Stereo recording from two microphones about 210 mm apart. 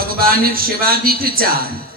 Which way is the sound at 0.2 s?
45° right (ahead or behind).